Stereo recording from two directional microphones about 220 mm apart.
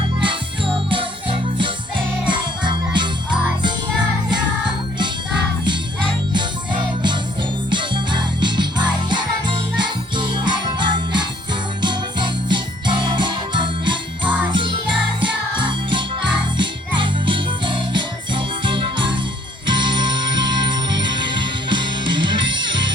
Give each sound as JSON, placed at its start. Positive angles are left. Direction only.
{"t": 0.2, "sound": "music", "side_deg": -20}
{"t": 2.2, "sound": "jingle bell", "side_deg": -20}
{"t": 7.7, "sound": "music", "side_deg": -20}
{"t": 14.5, "sound": "jingle bell", "side_deg": -20}
{"t": 15.2, "sound": "music", "side_deg": -20}
{"t": 17.0, "sound": "jingle bell", "side_deg": -20}
{"t": 19.6, "sound": "music", "side_deg": -20}